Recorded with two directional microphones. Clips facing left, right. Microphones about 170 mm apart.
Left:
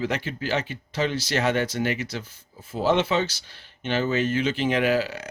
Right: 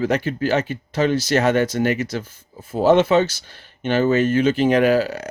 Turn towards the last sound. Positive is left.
turn(degrees=-45)  # may be behind; listen again after turning